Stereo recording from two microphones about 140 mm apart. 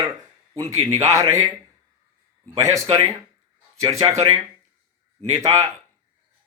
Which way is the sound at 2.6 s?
25° right (ahead or behind).